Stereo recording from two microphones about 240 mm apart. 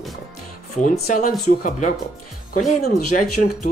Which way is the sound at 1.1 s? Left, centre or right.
Left.